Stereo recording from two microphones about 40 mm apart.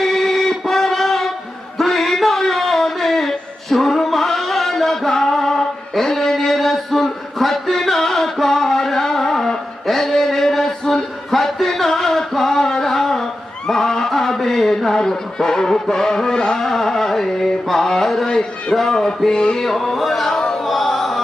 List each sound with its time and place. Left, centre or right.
0.0 s a sound: centre
11.3 s music: centre
13.7 s a sound: centre
18.3 s speech: centre
19.6 s music: centre
20.3 s carnatic music: centre
20.7 s music: centre